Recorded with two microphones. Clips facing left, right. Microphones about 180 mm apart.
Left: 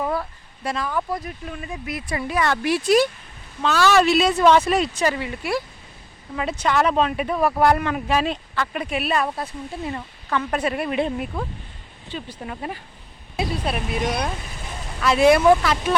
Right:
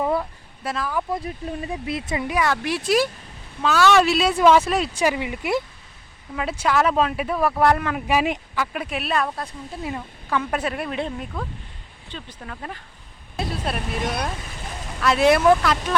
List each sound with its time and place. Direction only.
0.0 s speech: 20° right (ahead or behind)
0.6 s speech: 5° right (ahead or behind)
1.1 s speech: 30° right (ahead or behind); by 2.6 s 10° right (ahead or behind)
2.6 s speech: centre (ahead or behind); by 5.6 s 20° right (ahead or behind)
6.3 s speech: centre (ahead or behind)
8.0 s speech: 10° right (ahead or behind)
9.9 s speech: 10° right (ahead or behind); by 12.8 s 15° left (ahead or behind)
13.3 s speech: centre (ahead or behind)